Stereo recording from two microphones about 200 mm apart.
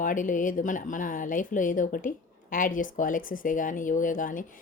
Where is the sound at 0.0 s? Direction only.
40° left (ahead or behind).